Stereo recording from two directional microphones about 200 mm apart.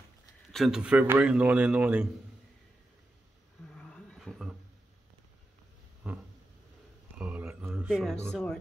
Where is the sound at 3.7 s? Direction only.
5° left (ahead or behind).